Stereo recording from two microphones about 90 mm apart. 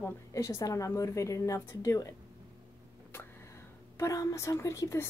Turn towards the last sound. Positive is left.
turn(degrees=35)  # may be behind; listen again after turning